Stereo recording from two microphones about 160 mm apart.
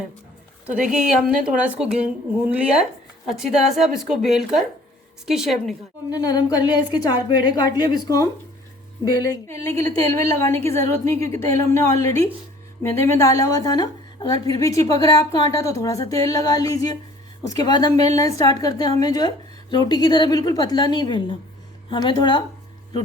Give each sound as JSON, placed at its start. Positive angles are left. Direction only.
{"t": 0.9, "sound": "a woman's voice", "side_deg": -5}
{"t": 6.1, "sound": "a woman's voice", "side_deg": 25}